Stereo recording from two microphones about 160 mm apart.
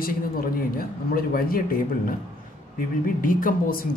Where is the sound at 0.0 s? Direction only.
65° left (ahead or behind).